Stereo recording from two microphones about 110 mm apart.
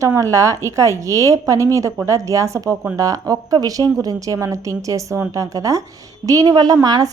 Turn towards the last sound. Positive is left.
turn(degrees=-40)  # may be behind; listen again after turning